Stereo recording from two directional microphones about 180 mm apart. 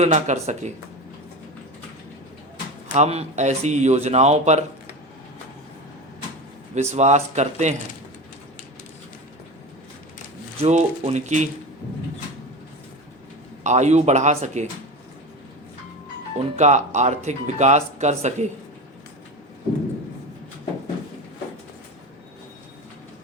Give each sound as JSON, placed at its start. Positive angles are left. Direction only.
{"t": 0.0, "sound": "speech", "side_deg": -40}
{"t": 2.9, "sound": "speech", "side_deg": -35}
{"t": 6.7, "sound": "speech", "side_deg": -40}
{"t": 10.6, "sound": "speech", "side_deg": -35}
{"t": 13.7, "sound": "speech", "side_deg": -40}
{"t": 16.3, "sound": "speech", "side_deg": -40}